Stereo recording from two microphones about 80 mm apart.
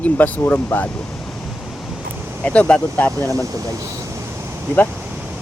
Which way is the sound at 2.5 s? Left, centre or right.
Centre.